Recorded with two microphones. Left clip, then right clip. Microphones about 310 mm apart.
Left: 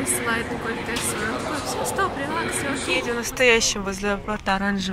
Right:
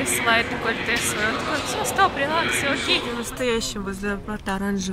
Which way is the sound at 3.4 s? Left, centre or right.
Centre.